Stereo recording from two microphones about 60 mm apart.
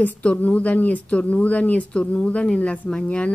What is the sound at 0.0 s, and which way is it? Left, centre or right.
Speech, left.